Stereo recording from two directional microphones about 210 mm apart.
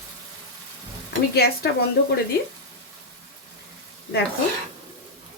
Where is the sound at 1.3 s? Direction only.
50° left (ahead or behind).